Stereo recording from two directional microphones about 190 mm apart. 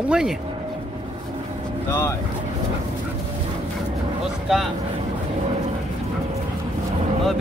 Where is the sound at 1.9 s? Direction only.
15° left (ahead or behind).